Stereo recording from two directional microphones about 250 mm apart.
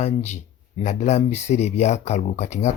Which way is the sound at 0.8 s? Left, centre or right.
Left.